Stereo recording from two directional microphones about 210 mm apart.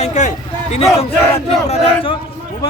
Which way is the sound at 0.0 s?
35° left (ahead or behind).